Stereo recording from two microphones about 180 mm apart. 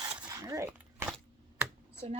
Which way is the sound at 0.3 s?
20° right (ahead or behind).